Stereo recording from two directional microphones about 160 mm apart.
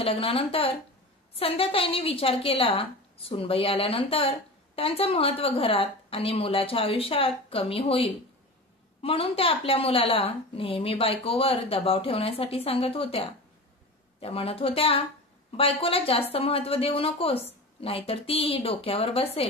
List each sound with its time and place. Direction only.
0.0 s a woman's voice: 35° left (ahead or behind)